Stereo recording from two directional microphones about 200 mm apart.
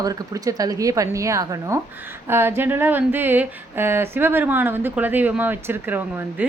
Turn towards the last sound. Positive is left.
turn(degrees=-10)  # may be behind; listen again after turning